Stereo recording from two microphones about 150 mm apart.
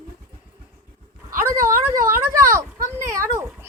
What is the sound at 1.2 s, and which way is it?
Dog, 20° right (ahead or behind).